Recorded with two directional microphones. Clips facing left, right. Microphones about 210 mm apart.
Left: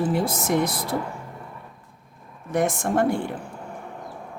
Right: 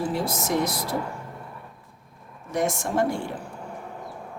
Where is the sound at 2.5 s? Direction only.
55° left (ahead or behind).